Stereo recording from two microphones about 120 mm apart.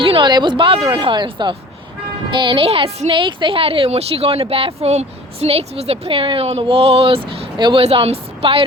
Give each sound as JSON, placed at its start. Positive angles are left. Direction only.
{"t": 0.0, "sound": "speech", "side_deg": -45}